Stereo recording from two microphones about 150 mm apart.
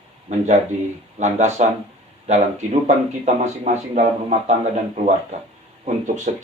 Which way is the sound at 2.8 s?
50° right (ahead or behind).